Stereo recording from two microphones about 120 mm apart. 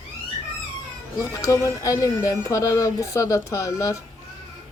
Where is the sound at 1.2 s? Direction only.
25° left (ahead or behind).